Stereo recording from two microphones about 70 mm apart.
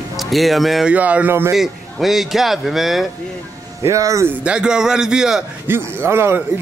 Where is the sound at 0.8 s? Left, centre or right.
Right.